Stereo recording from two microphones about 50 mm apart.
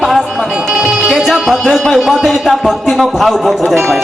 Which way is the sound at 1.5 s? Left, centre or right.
Centre.